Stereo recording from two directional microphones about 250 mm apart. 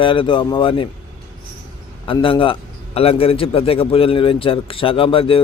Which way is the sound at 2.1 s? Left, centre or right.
Left.